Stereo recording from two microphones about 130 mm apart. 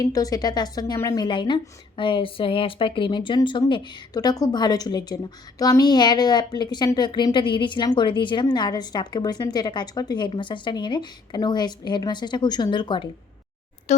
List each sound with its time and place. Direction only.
0.0 s a woman's voice: 25° left (ahead or behind)